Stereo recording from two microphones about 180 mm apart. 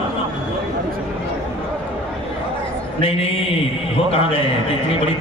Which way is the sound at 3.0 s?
30° left (ahead or behind).